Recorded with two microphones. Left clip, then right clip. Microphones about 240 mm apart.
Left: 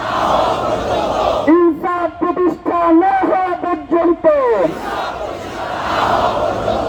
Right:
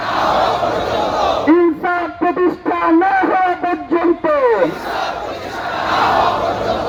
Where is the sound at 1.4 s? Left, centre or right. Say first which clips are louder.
Left 1 dB; right.